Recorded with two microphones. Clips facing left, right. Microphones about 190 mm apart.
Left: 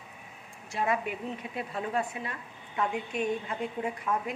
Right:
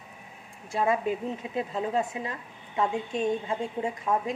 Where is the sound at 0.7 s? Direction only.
30° right (ahead or behind).